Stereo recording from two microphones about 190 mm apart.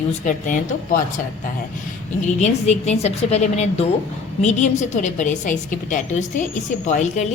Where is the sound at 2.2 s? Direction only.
35° left (ahead or behind).